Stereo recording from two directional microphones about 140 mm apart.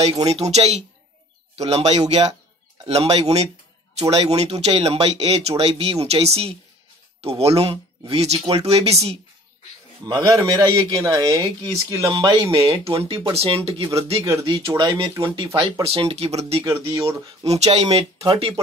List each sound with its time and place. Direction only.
0.2 s speech: 50° right (ahead or behind)
10.0 s speech: 25° right (ahead or behind)
13.3 s speech: 45° right (ahead or behind)
13.8 s speech: 20° right (ahead or behind); by 16.6 s 50° right (ahead or behind)
16.6 s speech: 25° right (ahead or behind)
17.7 s speech: 50° right (ahead or behind)